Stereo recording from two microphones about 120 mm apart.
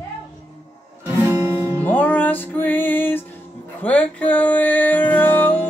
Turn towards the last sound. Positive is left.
turn(degrees=15)  # may be behind; listen again after turning